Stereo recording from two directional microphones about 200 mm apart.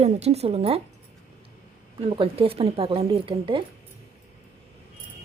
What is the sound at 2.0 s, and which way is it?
Speech, 30° right (ahead or behind).